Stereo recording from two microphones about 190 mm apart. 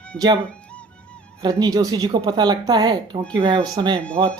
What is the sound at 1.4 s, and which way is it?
Speech, 20° right (ahead or behind).